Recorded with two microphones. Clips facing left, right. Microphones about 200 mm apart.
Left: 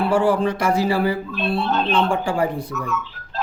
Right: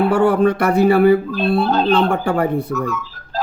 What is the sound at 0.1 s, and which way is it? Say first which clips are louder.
Speech: right 4 dB; 60° right (ahead or behind).